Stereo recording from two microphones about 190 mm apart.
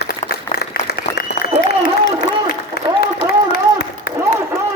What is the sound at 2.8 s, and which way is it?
Applause, 55° left (ahead or behind).